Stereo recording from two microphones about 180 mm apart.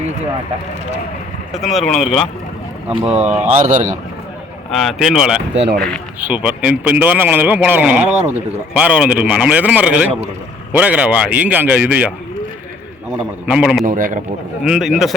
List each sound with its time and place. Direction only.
1.5 s speech: centre (ahead or behind)
2.9 s a man's voice: 35° right (ahead or behind)
4.7 s a man's voice: centre (ahead or behind)
13.5 s speech: 5° right (ahead or behind)
13.8 s a man's voice: 50° right (ahead or behind)
14.6 s speech: 5° right (ahead or behind)